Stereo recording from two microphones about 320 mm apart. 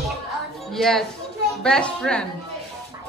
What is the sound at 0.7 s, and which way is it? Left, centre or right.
Speech, centre.